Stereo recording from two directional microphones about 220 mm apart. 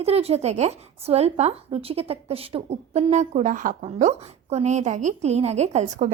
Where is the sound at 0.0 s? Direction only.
25° right (ahead or behind).